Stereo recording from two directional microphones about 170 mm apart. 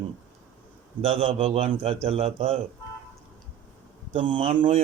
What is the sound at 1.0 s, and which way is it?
A man's voice, 35° right (ahead or behind).